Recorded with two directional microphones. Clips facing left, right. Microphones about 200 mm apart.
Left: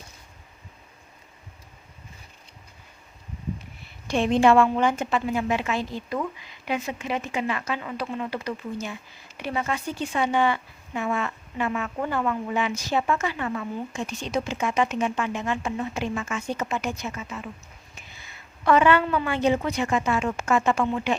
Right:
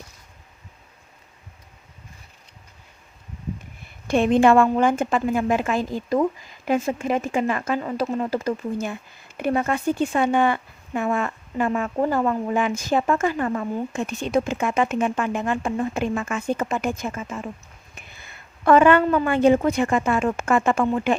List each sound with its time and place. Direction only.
3.8 s a woman's voice: 50° right (ahead or behind)